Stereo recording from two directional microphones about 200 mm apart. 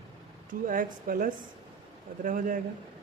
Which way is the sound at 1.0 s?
45° right (ahead or behind).